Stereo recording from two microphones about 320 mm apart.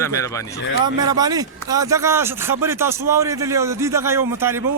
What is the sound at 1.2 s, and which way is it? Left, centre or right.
A man's voice, centre.